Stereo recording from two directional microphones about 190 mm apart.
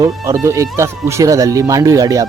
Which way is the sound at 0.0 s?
15° right (ahead or behind).